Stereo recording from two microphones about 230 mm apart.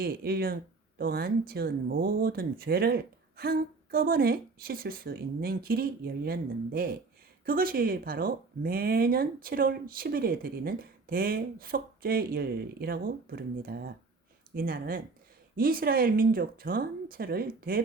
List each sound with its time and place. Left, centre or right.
0.0 s speech: right